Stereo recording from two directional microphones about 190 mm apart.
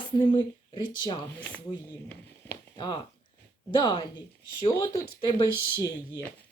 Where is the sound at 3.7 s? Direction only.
25° left (ahead or behind).